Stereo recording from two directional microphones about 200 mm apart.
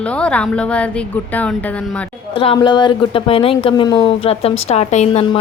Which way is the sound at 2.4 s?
25° left (ahead or behind).